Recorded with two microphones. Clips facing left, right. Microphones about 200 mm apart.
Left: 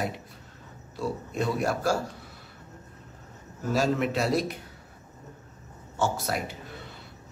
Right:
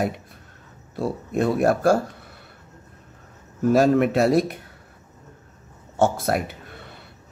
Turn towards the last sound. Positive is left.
turn(degrees=-55)  # may be behind; listen again after turning